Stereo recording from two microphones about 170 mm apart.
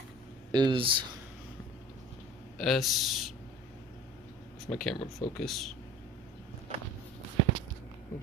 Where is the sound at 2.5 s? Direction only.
Centre (ahead or behind).